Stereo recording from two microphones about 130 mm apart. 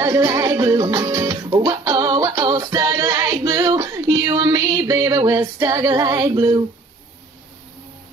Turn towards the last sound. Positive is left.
turn(degrees=-25)  # may be behind; listen again after turning